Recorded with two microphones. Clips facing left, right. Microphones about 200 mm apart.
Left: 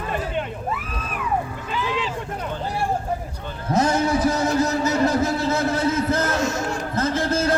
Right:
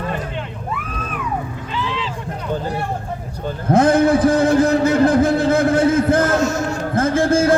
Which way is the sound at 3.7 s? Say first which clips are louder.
Right 7 dB; 55° right (ahead or behind).